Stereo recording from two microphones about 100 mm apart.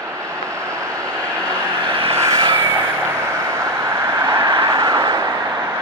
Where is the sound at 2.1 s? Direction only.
30° right (ahead or behind).